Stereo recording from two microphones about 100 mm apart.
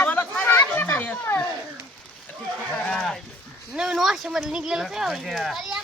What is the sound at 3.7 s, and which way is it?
A child's voice, 5° right (ahead or behind).